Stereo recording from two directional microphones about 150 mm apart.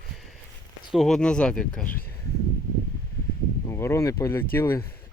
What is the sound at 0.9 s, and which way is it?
Speech, centre (ahead or behind).